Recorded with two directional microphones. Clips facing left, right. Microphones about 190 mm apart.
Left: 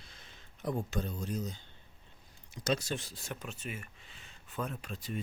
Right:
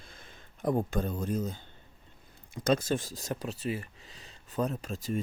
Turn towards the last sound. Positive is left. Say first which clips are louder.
# right 7 dB
turn(degrees=-45)  # may be behind; listen again after turning